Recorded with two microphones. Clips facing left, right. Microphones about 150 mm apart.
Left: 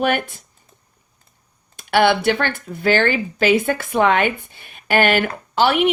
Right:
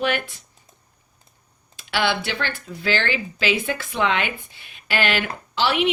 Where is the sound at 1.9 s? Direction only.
55° left (ahead or behind).